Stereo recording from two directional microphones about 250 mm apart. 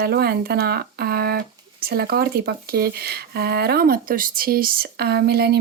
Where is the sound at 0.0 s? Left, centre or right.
Right.